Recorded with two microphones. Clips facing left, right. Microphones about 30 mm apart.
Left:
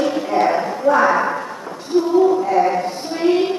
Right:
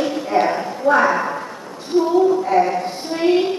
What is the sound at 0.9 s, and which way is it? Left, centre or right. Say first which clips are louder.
Speech: even; right.